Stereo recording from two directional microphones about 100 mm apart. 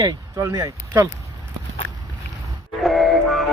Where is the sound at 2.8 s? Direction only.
Centre (ahead or behind).